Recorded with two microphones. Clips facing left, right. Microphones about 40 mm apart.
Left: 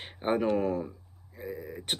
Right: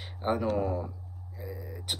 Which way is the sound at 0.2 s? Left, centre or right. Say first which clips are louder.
Left 2 dB; left.